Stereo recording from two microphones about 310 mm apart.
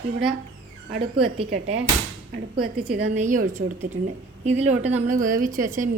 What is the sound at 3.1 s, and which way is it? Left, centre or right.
A woman's voice, right.